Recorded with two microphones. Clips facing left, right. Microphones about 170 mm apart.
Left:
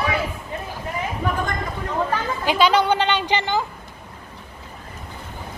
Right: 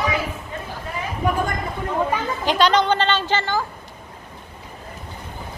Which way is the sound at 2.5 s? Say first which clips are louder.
Even; 10° left (ahead or behind).